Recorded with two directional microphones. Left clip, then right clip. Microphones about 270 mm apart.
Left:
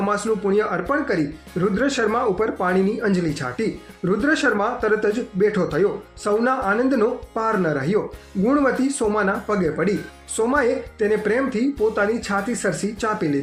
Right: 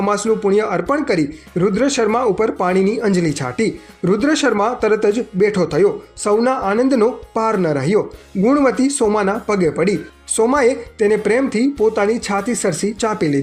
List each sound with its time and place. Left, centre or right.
0.0 s speech: right